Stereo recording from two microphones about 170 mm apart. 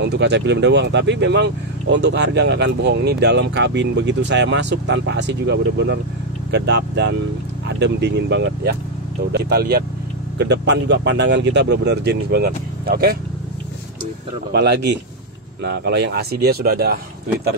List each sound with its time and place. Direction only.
0.0 s speech: 90° right
9.3 s speech: 70° right (ahead or behind)
10.3 s speech: 90° right; by 13.2 s 60° right (ahead or behind)
14.5 s speech: 75° right (ahead or behind)